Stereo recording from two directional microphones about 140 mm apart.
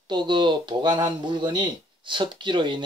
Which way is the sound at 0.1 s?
35° right (ahead or behind).